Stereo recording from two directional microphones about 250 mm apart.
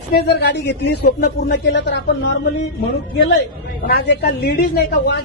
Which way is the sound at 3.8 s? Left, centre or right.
Left.